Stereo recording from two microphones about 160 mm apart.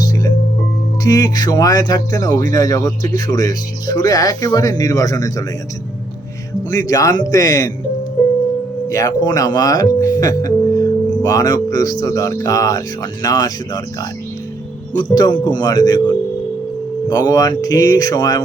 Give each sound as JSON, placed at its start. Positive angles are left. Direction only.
{"t": 0.0, "sound": "music", "side_deg": 25}
{"t": 1.0, "sound": "speech", "side_deg": 20}
{"t": 6.8, "sound": "speech", "side_deg": 20}
{"t": 8.9, "sound": "speech", "side_deg": 20}